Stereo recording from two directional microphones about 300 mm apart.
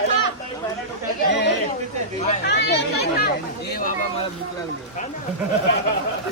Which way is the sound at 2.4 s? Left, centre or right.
Left.